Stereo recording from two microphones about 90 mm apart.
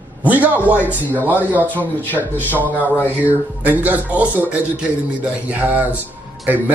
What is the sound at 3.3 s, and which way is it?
A man's voice, 20° right (ahead or behind).